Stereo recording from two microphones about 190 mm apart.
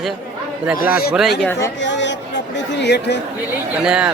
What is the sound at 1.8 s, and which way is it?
A woman's voice, 70° left (ahead or behind).